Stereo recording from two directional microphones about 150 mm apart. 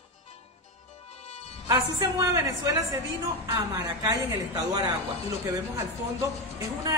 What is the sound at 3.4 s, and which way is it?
Speech, 25° right (ahead or behind).